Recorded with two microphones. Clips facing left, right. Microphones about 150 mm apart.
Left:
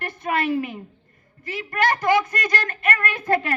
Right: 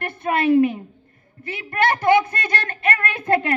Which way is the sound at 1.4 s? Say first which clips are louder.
Right 2 dB; 30° right (ahead or behind).